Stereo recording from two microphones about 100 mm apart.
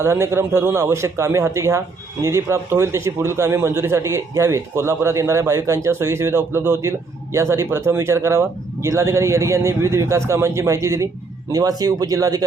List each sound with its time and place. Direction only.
0.0 s a man's voice: 25° right (ahead or behind)